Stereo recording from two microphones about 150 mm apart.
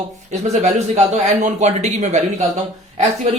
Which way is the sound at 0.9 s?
50° right (ahead or behind).